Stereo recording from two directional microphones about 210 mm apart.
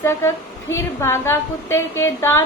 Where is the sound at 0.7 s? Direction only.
15° left (ahead or behind).